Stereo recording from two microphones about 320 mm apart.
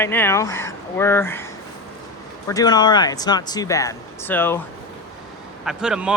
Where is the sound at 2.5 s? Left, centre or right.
Centre.